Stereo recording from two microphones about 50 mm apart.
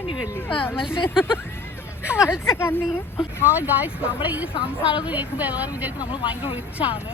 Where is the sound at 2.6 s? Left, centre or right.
Left.